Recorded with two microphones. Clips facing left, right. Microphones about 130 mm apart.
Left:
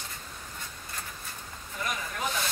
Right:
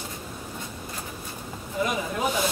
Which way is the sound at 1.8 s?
15° right (ahead or behind).